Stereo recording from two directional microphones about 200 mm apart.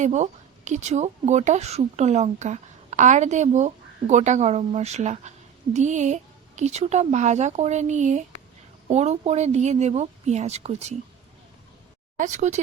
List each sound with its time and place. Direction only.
0.0 s a woman's voice: 35° right (ahead or behind)
12.1 s a woman's voice: 35° right (ahead or behind)